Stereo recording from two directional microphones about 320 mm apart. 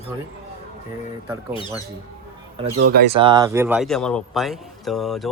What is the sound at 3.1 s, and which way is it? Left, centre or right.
A man's voice, centre.